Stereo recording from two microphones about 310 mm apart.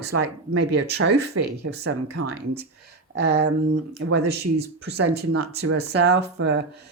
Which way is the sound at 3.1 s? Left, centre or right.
Right.